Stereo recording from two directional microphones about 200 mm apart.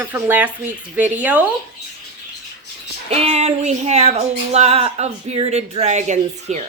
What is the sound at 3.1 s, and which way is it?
Speech, 30° right (ahead or behind).